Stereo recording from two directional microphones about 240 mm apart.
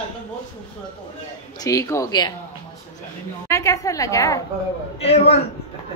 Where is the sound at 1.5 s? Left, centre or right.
Centre.